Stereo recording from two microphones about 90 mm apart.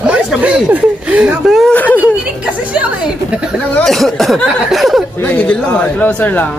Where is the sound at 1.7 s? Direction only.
20° left (ahead or behind).